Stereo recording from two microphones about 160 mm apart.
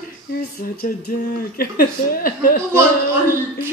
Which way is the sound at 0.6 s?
60° left (ahead or behind).